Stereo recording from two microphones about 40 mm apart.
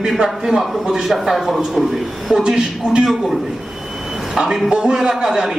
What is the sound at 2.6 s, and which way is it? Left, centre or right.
Speech, right.